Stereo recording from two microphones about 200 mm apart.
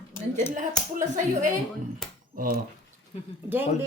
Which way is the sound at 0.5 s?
40° right (ahead or behind).